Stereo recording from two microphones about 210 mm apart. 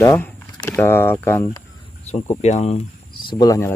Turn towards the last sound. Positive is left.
turn(degrees=15)  # may be behind; listen again after turning